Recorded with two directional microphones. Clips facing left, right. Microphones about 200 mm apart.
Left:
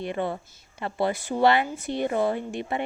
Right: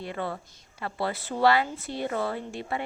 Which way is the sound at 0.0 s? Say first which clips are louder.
Left 4 dB; 20° left (ahead or behind).